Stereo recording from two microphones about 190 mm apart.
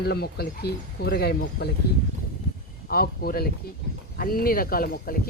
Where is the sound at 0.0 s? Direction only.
55° left (ahead or behind).